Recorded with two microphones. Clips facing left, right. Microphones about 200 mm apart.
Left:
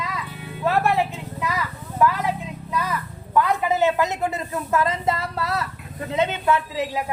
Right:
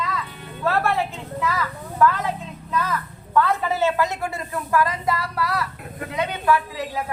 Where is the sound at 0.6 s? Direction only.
15° left (ahead or behind).